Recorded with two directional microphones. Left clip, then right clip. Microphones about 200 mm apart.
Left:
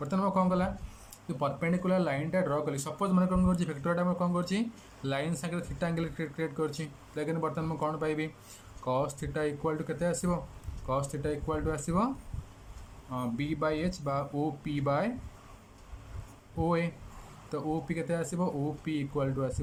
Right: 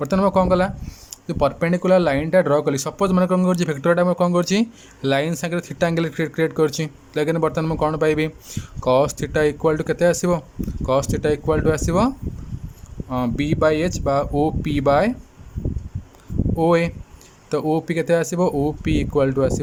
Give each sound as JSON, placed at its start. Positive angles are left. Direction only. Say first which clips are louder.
{"t": 0.0, "sound": "speech", "louder": "right 12 dB", "side_deg": -45}
{"t": 16.6, "sound": "speech", "louder": "right 13 dB", "side_deg": -55}